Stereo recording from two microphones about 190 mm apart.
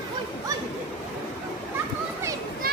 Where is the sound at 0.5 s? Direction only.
20° right (ahead or behind).